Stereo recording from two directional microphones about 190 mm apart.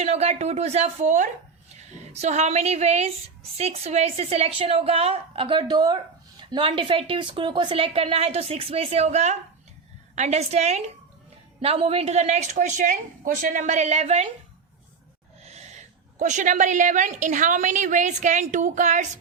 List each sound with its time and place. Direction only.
0.0 s a woman's voice: 35° right (ahead or behind)
15.4 s a woman's voice: 35° right (ahead or behind)